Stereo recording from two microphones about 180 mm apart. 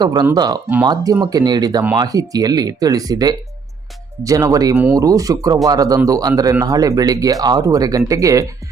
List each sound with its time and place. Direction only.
0.0 s speech: 20° right (ahead or behind)